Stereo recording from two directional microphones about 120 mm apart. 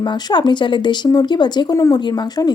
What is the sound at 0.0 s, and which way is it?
A woman's voice, 40° left (ahead or behind).